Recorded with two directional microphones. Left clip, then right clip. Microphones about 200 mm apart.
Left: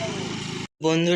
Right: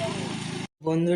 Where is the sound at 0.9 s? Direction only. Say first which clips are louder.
Left 3 dB; 5° right (ahead or behind).